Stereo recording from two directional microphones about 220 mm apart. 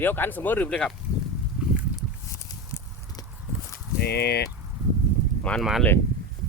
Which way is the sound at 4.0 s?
45° left (ahead or behind).